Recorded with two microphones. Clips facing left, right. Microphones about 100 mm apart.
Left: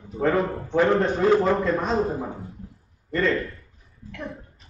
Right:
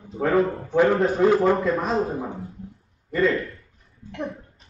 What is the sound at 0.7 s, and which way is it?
A man's voice, 5° right (ahead or behind).